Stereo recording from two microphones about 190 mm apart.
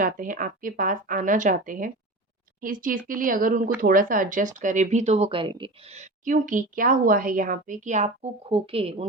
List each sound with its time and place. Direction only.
0.0 s a woman's voice: 45° right (ahead or behind)